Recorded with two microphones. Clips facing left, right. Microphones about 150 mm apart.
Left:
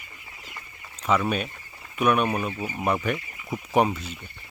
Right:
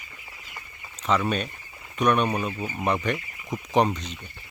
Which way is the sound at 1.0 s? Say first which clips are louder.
Even; 5° left (ahead or behind).